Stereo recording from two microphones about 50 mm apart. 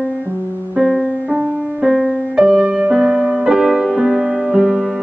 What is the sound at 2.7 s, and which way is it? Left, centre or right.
Music, right.